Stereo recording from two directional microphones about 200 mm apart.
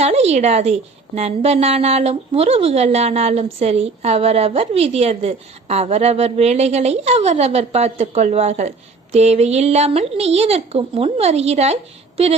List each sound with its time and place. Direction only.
0.0 s a woman's voice: 30° right (ahead or behind)